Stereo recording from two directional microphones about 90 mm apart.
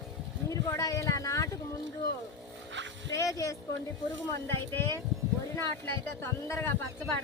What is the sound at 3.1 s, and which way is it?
Speech, 35° left (ahead or behind).